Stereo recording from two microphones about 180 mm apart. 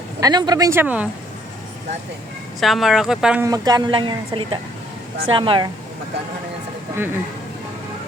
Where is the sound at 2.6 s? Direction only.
Centre (ahead or behind).